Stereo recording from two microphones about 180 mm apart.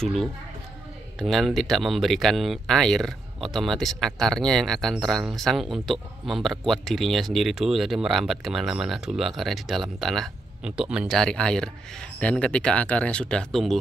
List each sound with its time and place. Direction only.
0.0 s speech: centre (ahead or behind)